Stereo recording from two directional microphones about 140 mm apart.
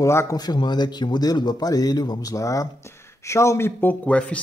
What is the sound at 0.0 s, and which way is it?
Speech, 20° left (ahead or behind).